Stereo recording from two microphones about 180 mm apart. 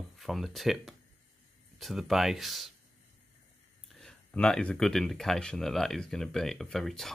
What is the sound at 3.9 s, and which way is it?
Speech, centre (ahead or behind).